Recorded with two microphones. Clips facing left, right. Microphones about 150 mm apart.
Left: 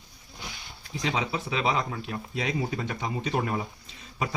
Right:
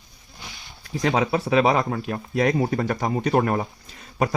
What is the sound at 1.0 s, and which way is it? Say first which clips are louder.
Speech: right 8 dB; 55° right (ahead or behind).